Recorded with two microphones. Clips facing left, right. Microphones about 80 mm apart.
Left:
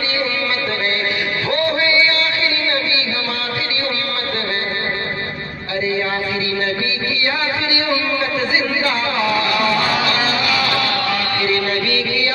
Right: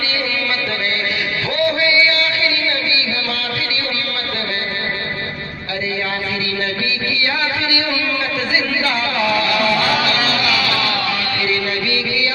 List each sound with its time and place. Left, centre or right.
1.5 s music: left
8.8 s music: left